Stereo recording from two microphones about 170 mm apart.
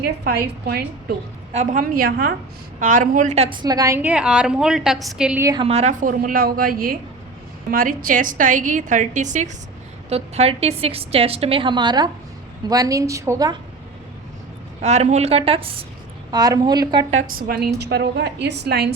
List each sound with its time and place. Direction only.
0.0 s a woman's voice: 65° right (ahead or behind)
1.5 s a woman's voice: 55° right (ahead or behind)
2.8 s a woman's voice: 50° right (ahead or behind)
3.6 s a woman's voice: 20° right (ahead or behind); by 5.4 s 5° right (ahead or behind)
5.4 s a woman's voice: 20° right (ahead or behind)
5.6 s a woman's voice: 40° right (ahead or behind); by 13.6 s 20° right (ahead or behind)
14.8 s a woman's voice: 40° right (ahead or behind)
16.3 s a woman's voice: 25° right (ahead or behind)
17.3 s a woman's voice: 60° right (ahead or behind)
17.7 s a woman's voice: 80° right